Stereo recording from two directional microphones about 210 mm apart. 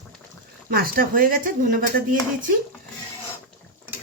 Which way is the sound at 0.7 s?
45° right (ahead or behind).